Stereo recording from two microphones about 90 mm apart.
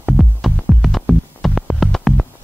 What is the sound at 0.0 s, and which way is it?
Music, centre (ahead or behind).